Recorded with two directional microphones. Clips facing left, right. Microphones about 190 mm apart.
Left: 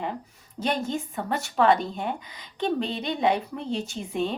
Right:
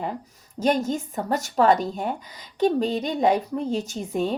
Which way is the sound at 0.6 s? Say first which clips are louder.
Right 5 dB; 45° right (ahead or behind).